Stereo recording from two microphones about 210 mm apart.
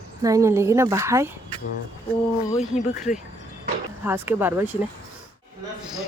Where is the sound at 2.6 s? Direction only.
35° left (ahead or behind).